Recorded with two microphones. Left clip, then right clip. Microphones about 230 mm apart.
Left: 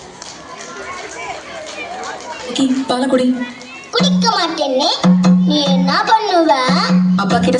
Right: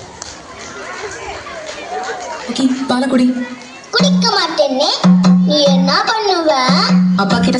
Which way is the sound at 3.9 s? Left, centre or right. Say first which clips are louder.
Right 1 dB; left.